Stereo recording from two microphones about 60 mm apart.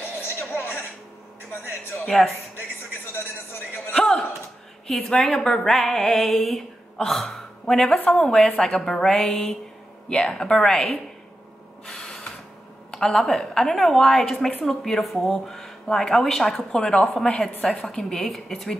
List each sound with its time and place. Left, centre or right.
0.2 s music: left
2.0 s speech: centre
3.9 s a sound: centre
4.8 s a woman's voice: centre
11.8 s gasp: centre
12.9 s speech: centre